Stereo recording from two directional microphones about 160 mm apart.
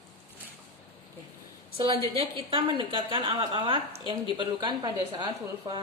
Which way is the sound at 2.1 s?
35° right (ahead or behind).